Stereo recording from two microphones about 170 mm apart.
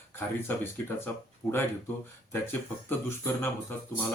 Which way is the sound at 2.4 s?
15° left (ahead or behind).